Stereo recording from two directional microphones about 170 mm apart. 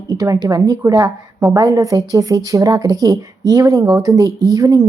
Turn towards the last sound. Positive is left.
turn(degrees=-20)  # may be behind; listen again after turning